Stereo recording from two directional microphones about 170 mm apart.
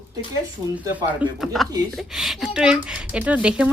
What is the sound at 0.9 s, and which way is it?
A child's voice, 10° right (ahead or behind).